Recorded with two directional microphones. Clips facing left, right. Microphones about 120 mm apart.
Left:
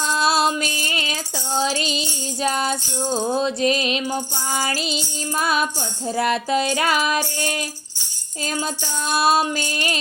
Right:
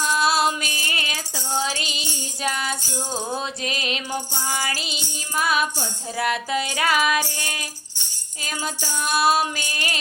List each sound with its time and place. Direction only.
0.1 s music: 25° left (ahead or behind)
9.0 s music: 30° left (ahead or behind)